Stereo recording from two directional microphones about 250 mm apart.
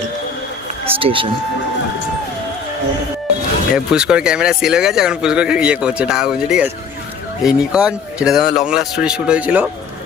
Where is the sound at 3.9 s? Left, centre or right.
Centre.